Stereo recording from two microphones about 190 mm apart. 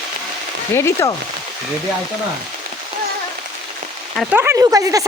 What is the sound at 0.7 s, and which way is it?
Speech, 15° left (ahead or behind).